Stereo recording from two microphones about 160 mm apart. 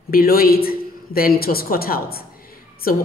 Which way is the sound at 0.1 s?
70° left (ahead or behind).